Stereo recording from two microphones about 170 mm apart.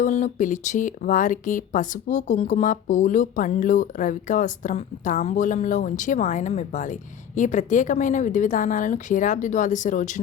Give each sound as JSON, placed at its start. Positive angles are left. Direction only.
{"t": 0.0, "sound": "speech", "side_deg": 45}